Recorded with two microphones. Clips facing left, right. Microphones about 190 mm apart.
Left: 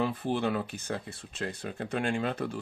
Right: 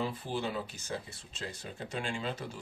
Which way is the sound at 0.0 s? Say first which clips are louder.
Left 6 dB; 60° left (ahead or behind).